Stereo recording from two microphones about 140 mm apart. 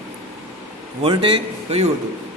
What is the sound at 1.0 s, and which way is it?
Speech, 40° right (ahead or behind).